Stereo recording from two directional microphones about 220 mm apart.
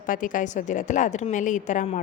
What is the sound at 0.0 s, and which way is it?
Speech, 35° left (ahead or behind).